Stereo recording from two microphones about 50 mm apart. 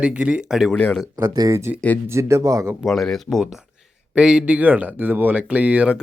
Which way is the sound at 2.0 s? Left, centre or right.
Right.